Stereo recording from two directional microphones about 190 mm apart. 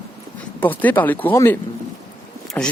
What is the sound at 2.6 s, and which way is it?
Speech, 10° left (ahead or behind).